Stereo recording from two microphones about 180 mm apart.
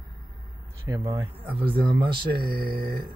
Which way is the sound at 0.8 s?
20° right (ahead or behind).